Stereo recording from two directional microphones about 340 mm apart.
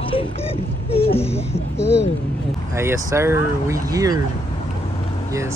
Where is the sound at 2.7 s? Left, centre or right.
Centre.